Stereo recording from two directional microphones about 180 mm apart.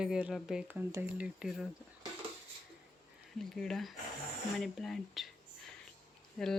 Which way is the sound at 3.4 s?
Centre (ahead or behind).